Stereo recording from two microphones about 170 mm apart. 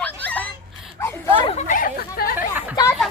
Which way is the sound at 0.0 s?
10° left (ahead or behind).